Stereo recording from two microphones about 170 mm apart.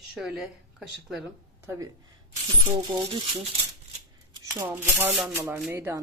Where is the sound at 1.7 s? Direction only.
20° right (ahead or behind).